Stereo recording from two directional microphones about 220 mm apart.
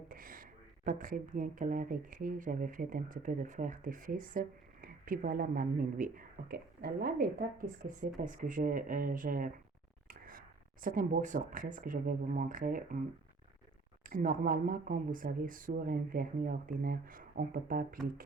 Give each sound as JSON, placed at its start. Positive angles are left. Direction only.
{"t": 0.1, "sound": "speech", "side_deg": -40}
{"t": 14.0, "sound": "speech", "side_deg": -40}